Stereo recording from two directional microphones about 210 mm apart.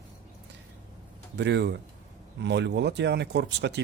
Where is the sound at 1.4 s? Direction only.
55° right (ahead or behind).